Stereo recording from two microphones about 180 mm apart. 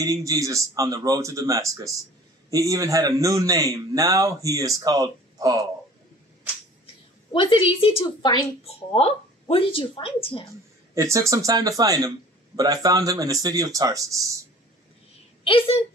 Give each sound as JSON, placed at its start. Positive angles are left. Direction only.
{"t": 0.0, "sound": "a man's voice", "side_deg": -20}
{"t": 7.3, "sound": "speech", "side_deg": 30}
{"t": 11.0, "sound": "a man's voice", "side_deg": -15}
{"t": 15.4, "sound": "a woman's voice", "side_deg": 30}